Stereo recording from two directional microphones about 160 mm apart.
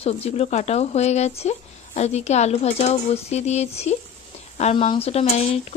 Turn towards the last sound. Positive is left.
turn(degrees=40)  # may be behind; listen again after turning